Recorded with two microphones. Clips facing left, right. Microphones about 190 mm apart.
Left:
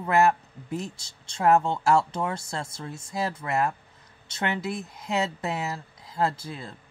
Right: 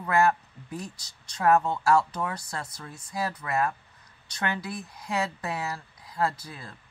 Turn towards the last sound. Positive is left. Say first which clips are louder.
# left 4 dB
turn(degrees=25)  # may be behind; listen again after turning